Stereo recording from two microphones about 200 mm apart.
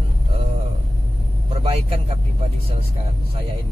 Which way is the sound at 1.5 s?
30° right (ahead or behind).